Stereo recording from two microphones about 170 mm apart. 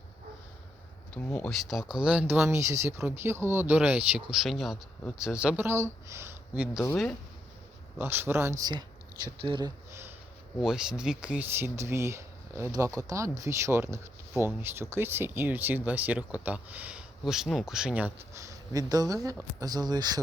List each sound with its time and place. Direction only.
1.1 s speech: 10° left (ahead or behind)
1.6 s speech: 5° right (ahead or behind)
7.9 s speech: 15° right (ahead or behind)
10.6 s speech: 5° right (ahead or behind); by 20.2 s 25° right (ahead or behind)